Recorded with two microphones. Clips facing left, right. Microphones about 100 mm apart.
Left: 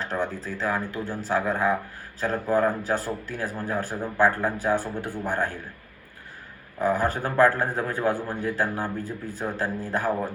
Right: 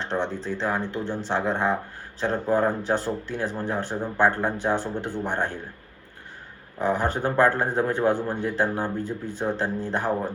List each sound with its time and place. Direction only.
0.0 s a sound: 25° right (ahead or behind)
0.4 s speech: 25° right (ahead or behind)
6.8 s speech: 25° right (ahead or behind)